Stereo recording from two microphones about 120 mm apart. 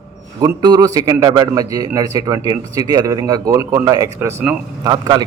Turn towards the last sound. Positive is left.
turn(degrees=-35)  # may be behind; listen again after turning